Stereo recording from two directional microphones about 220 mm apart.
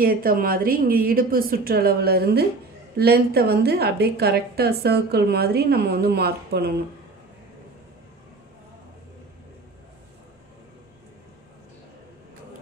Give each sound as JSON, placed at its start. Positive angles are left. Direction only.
{"t": 0.0, "sound": "a woman's voice", "side_deg": -40}